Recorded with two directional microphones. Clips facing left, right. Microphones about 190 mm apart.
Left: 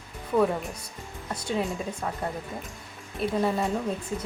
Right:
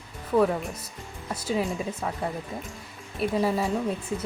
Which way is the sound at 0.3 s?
Centre (ahead or behind).